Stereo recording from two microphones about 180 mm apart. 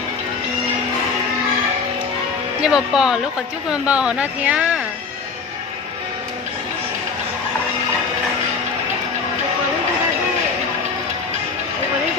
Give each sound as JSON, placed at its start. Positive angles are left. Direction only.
{"t": 2.6, "sound": "speech", "side_deg": -5}